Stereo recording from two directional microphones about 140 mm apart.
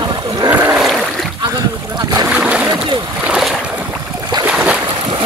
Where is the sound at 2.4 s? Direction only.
5° right (ahead or behind).